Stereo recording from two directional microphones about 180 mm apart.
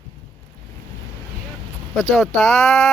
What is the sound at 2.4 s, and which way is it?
Speech, centre (ahead or behind).